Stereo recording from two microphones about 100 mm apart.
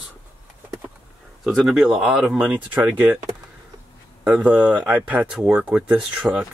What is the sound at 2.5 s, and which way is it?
Speech, 20° right (ahead or behind).